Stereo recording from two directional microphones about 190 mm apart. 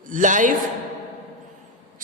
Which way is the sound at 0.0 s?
45° right (ahead or behind).